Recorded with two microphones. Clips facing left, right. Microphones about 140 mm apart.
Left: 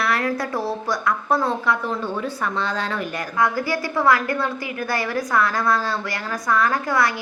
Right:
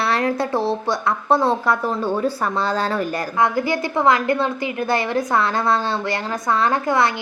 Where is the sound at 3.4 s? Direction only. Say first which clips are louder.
Right 2 dB; 20° right (ahead or behind).